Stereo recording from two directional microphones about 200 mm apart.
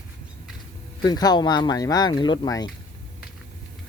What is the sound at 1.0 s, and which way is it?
Speech, 20° left (ahead or behind).